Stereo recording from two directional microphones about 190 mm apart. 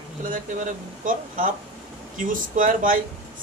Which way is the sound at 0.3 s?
45° right (ahead or behind).